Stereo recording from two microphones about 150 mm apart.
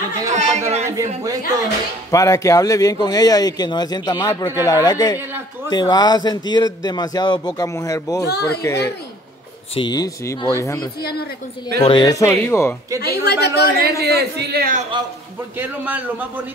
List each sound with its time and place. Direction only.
0.3 s chatter: 50° right (ahead or behind)
0.8 s speech: 20° right (ahead or behind)
2.0 s speech: 20° left (ahead or behind)
11.0 s speech: 90° left
11.8 s speech: 30° left (ahead or behind)
13.0 s speech: 90° left
13.7 s a woman's voice: 90° right
15.5 s a man's voice: 10° right (ahead or behind)